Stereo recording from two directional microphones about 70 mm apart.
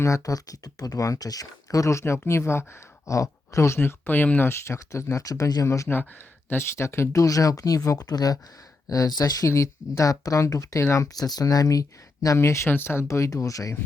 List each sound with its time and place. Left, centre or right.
0.0 s speech: left
5.6 s speech: left
6.5 s speech: left
9.5 s speech: left
13.1 s speech: left